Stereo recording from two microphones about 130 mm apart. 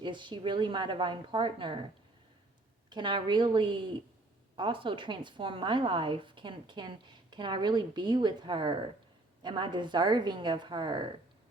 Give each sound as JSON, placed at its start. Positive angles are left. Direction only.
{"t": 0.0, "sound": "speech", "side_deg": -35}
{"t": 2.9, "sound": "speech", "side_deg": -35}